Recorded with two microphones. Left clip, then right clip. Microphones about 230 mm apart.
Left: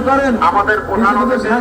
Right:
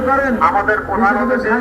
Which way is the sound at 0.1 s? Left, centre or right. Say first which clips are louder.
Left 2 dB; left.